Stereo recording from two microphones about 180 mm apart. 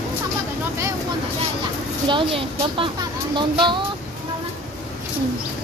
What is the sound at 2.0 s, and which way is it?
Speech, 25° right (ahead or behind).